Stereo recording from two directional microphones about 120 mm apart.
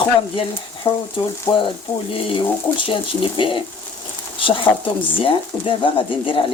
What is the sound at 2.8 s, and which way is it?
Speech, 45° left (ahead or behind).